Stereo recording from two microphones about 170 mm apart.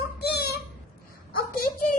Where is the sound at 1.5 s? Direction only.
60° left (ahead or behind).